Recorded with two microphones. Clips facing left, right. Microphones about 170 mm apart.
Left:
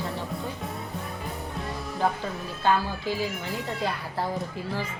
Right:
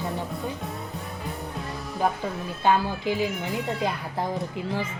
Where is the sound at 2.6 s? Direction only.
20° right (ahead or behind).